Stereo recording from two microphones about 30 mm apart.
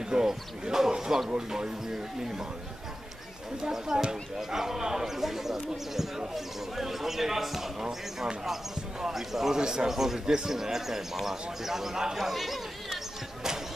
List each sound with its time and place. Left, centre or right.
0.1 s a man's voice: right
3.7 s a man's voice: centre
9.0 s a man's voice: centre
9.6 s a man's voice: right
9.8 s a man's voice: centre
12.2 s chatter: centre